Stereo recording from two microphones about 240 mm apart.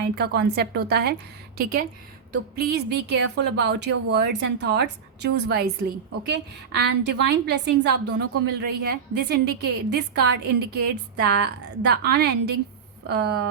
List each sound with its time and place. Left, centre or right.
0.0 s a woman's voice: right
2.6 s a woman's voice: right